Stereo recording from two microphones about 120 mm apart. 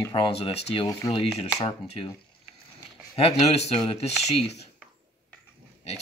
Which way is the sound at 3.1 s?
60° left (ahead or behind).